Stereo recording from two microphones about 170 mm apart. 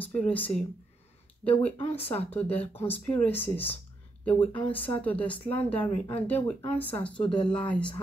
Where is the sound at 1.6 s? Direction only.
35° left (ahead or behind).